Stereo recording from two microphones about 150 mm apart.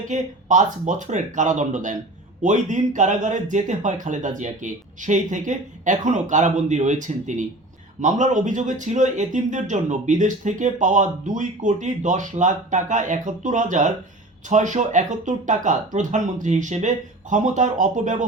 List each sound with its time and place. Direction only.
0.0 s speech: 55° right (ahead or behind)